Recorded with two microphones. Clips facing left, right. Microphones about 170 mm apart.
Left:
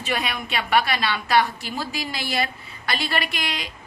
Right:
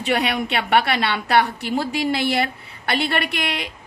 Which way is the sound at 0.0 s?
65° right (ahead or behind).